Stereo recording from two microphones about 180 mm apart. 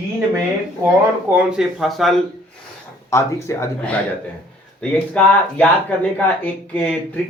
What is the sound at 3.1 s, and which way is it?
Speech, 15° left (ahead or behind).